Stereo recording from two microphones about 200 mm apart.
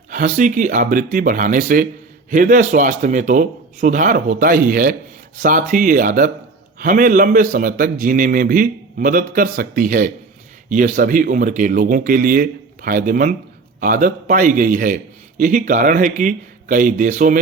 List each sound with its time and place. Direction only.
0.1 s a man's voice: 40° right (ahead or behind)